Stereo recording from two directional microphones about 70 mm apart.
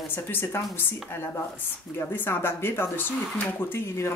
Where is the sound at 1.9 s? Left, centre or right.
Left.